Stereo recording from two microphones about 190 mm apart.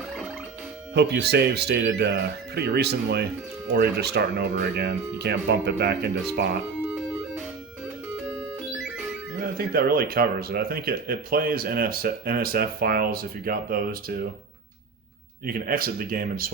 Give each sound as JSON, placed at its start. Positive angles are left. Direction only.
{"t": 0.9, "sound": "speech", "side_deg": -60}
{"t": 9.4, "sound": "speech", "side_deg": -50}
{"t": 15.4, "sound": "speech", "side_deg": -50}